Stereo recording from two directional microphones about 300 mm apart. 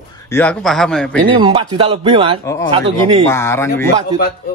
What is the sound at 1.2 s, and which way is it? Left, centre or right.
Speech, centre.